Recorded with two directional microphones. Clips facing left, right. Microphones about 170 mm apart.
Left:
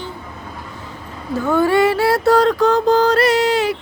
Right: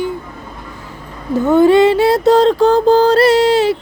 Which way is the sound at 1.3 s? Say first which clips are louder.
Right 6 dB; 20° right (ahead or behind).